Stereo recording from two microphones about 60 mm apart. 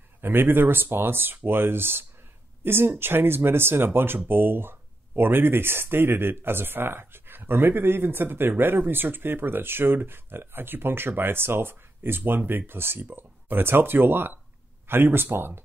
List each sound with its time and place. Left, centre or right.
0.2 s speech: right